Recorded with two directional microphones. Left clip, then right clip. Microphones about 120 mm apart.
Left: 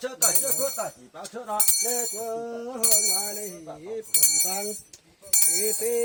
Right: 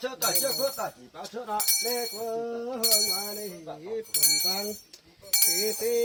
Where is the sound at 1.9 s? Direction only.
45° left (ahead or behind).